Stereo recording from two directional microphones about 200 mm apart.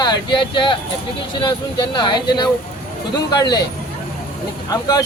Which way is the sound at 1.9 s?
20° left (ahead or behind).